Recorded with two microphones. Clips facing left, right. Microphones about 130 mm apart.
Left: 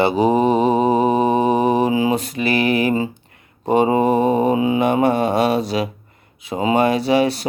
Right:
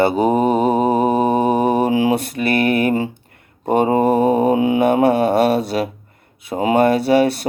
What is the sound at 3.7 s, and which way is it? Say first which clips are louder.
Speech: even; 50° right (ahead or behind).